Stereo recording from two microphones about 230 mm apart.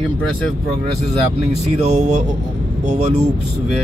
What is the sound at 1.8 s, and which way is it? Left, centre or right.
Speech, right.